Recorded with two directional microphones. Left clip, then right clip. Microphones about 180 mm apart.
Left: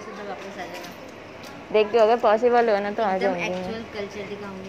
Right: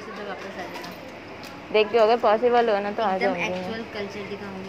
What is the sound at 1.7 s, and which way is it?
A woman's voice, 20° left (ahead or behind).